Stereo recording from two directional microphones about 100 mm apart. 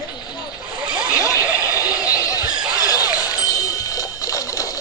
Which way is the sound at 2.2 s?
35° left (ahead or behind).